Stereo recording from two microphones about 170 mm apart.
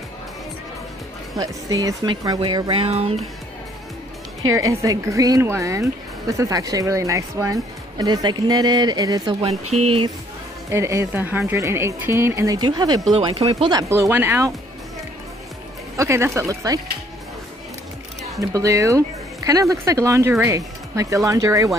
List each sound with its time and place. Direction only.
1.3 s speech: 20° right (ahead or behind); by 3.3 s 35° right (ahead or behind)
4.4 s speech: 20° right (ahead or behind)
9.4 s speech: 35° right (ahead or behind)
10.7 s speech: 15° right (ahead or behind); by 13.7 s 35° right (ahead or behind)
13.7 s speech: 15° right (ahead or behind)
16.0 s speech: 15° right (ahead or behind)
18.5 s speech: 20° right (ahead or behind)